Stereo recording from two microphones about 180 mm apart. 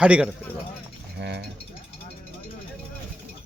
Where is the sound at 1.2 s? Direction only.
70° right (ahead or behind).